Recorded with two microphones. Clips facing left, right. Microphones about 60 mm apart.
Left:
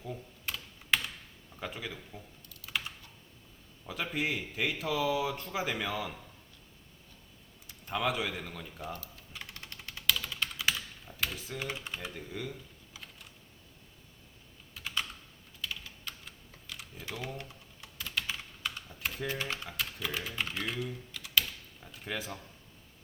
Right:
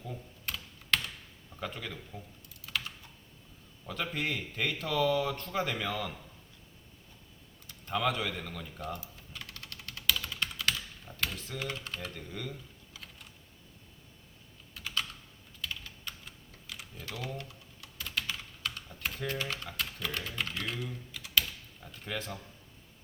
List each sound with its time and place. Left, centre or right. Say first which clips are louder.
0.0 s computer keyboard: left 1 dB; centre
1.6 s speech: right 1 dB; centre
2.6 s typing: even; centre
3.8 s speech: left 1 dB; centre
7.9 s speech: right 1 dB; centre
9.3 s a sound: even; centre
10.1 s typing: even; centre
10.6 s typing: left 1 dB; centre
11.0 s speech: even; centre
15.6 s typing: even; centre
17.3 s typing: right 1 dB; left
18.0 s typing: even; centre
19.7 s speech: even; centre